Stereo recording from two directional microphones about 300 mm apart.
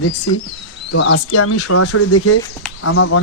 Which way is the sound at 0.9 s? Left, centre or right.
Left.